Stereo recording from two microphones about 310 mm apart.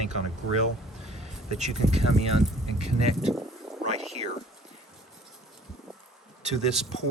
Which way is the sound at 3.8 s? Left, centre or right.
Right.